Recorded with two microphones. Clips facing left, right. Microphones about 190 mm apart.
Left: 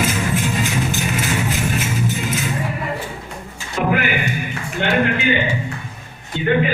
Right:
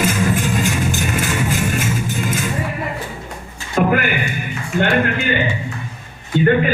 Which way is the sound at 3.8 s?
45° right (ahead or behind).